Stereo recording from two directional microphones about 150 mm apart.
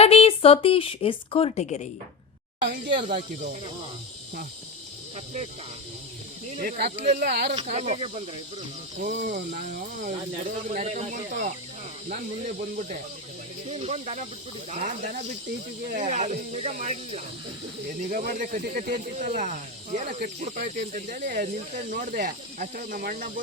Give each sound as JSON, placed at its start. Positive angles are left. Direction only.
{"t": 0.0, "sound": "speech", "side_deg": 40}
{"t": 2.7, "sound": "speech", "side_deg": -70}
{"t": 5.1, "sound": "speech", "side_deg": -50}
{"t": 6.6, "sound": "speech", "side_deg": -85}
{"t": 7.6, "sound": "speech", "side_deg": -50}
{"t": 9.0, "sound": "speech", "side_deg": -70}
{"t": 13.7, "sound": "speech", "side_deg": -45}
{"t": 18.1, "sound": "speech", "side_deg": -70}